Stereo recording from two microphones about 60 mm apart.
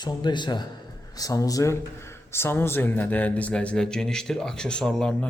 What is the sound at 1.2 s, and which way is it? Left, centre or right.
Speech, left.